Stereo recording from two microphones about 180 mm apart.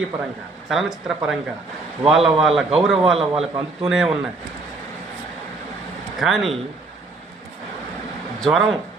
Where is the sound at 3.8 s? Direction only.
5° right (ahead or behind).